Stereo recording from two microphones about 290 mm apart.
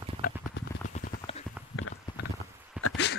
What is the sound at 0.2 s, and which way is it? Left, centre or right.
Clip-clop, left.